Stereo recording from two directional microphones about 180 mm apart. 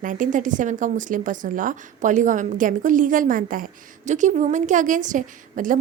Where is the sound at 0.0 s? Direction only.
45° right (ahead or behind).